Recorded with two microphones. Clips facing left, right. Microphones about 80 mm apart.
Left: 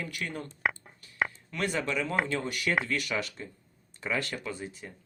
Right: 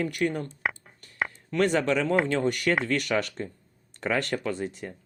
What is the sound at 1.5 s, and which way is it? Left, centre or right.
Speech, right.